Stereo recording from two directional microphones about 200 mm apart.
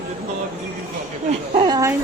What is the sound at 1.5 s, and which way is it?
Speech, 20° right (ahead or behind).